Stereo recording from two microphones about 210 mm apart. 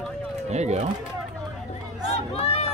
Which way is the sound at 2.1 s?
30° left (ahead or behind).